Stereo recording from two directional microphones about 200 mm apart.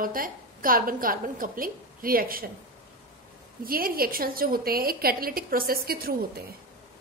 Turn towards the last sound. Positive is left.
turn(degrees=-50)  # may be behind; listen again after turning